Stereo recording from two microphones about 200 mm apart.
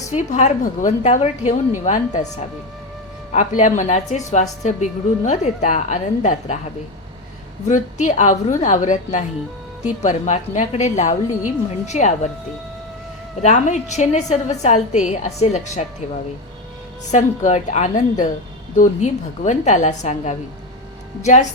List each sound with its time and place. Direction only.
0.1 s a woman's voice: 35° left (ahead or behind)
7.7 s a woman's voice: 35° left (ahead or behind)
13.4 s a woman's voice: 35° left (ahead or behind)
17.1 s a woman's voice: 35° left (ahead or behind)